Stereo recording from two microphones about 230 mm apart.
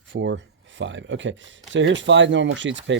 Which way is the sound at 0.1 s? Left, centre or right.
Right.